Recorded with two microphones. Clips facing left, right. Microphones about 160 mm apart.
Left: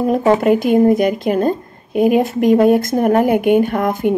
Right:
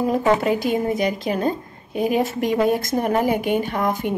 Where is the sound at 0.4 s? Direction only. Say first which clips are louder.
Left 8 dB; 55° left (ahead or behind).